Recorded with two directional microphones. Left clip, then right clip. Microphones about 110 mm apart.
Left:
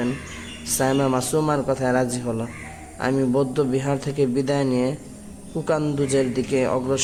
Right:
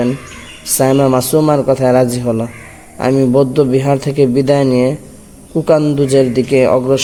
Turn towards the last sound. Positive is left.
turn(degrees=-30)  # may be behind; listen again after turning